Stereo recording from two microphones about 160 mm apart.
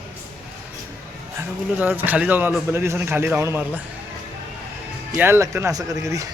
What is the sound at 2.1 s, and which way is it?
Speech, 10° right (ahead or behind).